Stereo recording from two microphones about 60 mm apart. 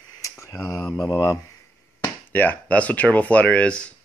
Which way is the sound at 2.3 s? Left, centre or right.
Left.